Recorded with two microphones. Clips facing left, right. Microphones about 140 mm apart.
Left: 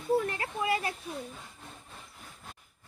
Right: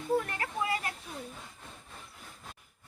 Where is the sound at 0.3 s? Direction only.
25° left (ahead or behind).